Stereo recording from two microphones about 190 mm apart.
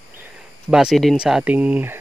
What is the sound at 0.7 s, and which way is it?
Speech, centre (ahead or behind).